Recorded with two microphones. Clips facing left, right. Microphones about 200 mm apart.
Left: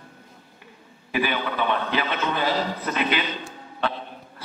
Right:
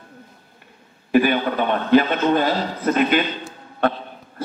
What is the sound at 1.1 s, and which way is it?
A man's voice, 45° right (ahead or behind).